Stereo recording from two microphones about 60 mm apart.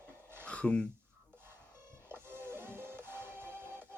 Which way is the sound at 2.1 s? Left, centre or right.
Right.